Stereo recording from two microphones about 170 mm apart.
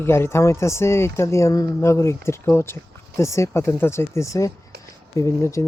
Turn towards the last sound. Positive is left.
turn(degrees=15)  # may be behind; listen again after turning